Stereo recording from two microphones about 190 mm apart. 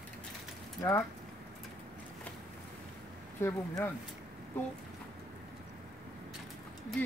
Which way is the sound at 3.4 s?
10° left (ahead or behind).